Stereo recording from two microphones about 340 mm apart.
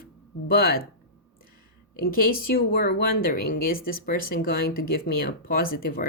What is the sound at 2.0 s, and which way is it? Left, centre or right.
Speech, left.